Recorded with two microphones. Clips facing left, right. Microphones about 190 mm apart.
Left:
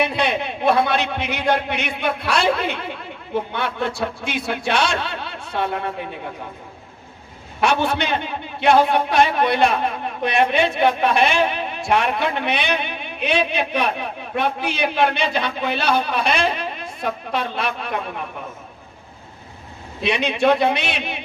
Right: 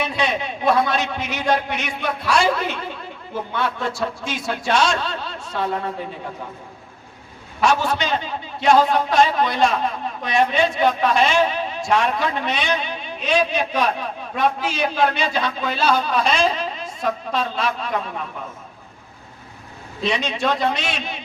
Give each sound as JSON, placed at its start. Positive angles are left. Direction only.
{"t": 0.0, "sound": "a man's voice", "side_deg": 60}
{"t": 7.6, "sound": "a man's voice", "side_deg": 60}
{"t": 20.0, "sound": "a man's voice", "side_deg": 60}